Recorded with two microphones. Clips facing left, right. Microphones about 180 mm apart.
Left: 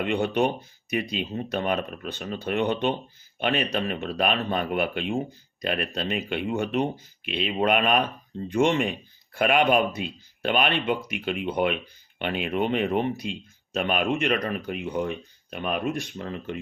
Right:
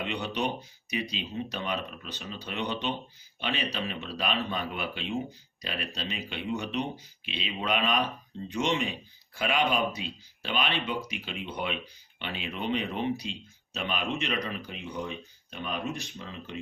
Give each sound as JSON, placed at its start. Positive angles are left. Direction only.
{"t": 0.0, "sound": "speech", "side_deg": 50}